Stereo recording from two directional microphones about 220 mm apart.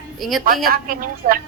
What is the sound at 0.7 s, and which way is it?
Speech, 40° right (ahead or behind).